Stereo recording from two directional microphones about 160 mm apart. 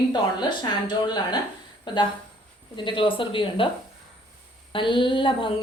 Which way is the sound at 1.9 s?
30° left (ahead or behind).